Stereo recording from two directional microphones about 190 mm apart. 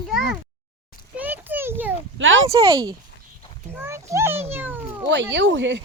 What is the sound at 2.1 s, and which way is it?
Speech, 90° right.